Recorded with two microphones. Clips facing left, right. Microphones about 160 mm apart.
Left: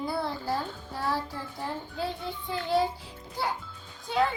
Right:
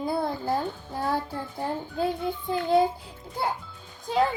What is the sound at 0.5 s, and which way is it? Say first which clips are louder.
A child's voice: right 4 dB; 50° right (ahead or behind).